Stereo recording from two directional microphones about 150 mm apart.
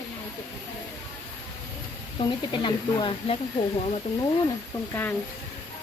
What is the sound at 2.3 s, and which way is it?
Speech, 35° left (ahead or behind).